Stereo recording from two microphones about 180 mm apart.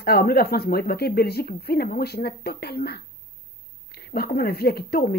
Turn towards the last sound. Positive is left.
turn(degrees=60)  # may be behind; listen again after turning